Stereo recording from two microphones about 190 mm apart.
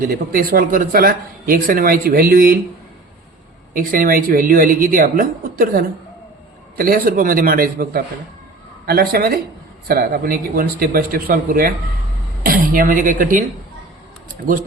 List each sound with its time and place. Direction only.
0.0 s speech: 50° right (ahead or behind)
3.8 s speech: 45° right (ahead or behind)
14.5 s speech: 45° right (ahead or behind)